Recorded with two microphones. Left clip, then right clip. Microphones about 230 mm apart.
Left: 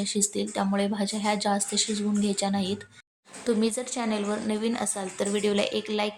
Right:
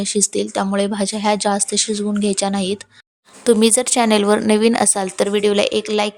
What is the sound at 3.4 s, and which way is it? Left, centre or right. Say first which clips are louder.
Speech: right 12 dB; right.